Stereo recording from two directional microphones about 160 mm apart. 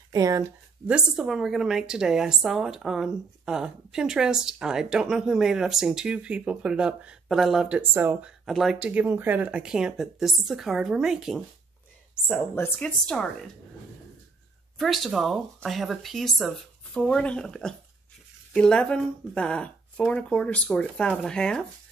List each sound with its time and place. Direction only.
0.1 s speech: 20° right (ahead or behind)
0.8 s a woman's voice: 5° right (ahead or behind)
12.3 s a woman's voice: 10° left (ahead or behind)
14.8 s a woman's voice: centre (ahead or behind)